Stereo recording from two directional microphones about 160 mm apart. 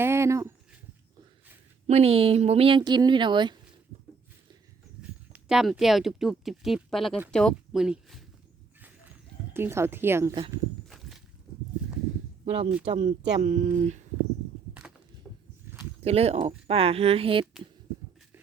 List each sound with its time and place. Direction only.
0.0 s a sound: 15° right (ahead or behind)
1.9 s speech: 40° right (ahead or behind)
5.3 s speech: 5° right (ahead or behind)
9.5 s speech: 15° right (ahead or behind)
10.8 s walk: centre (ahead or behind)
12.5 s speech: 40° right (ahead or behind)
14.7 s a sound: 10° right (ahead or behind)
15.3 s walk: 5° right (ahead or behind)
16.0 s speech: 40° right (ahead or behind)